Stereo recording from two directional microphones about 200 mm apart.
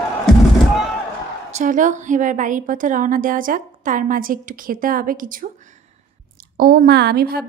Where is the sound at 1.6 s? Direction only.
40° right (ahead or behind).